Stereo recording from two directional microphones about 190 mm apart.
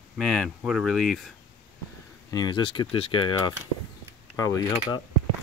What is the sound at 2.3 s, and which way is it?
Speech, 20° left (ahead or behind).